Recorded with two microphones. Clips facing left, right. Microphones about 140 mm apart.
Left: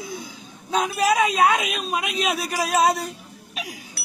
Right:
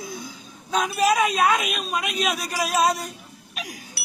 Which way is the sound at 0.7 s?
25° left (ahead or behind).